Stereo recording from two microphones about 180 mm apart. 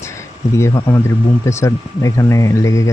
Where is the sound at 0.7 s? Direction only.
20° left (ahead or behind).